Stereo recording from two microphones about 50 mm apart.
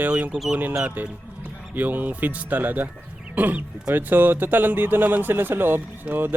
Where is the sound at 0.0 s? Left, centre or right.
Right.